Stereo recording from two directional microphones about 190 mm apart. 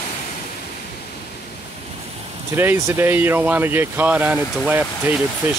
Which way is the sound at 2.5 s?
15° right (ahead or behind).